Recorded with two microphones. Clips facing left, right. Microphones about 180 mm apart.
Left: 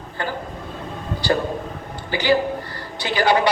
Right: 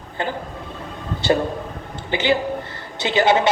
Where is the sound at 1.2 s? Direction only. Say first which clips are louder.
Right 2 dB; 25° right (ahead or behind).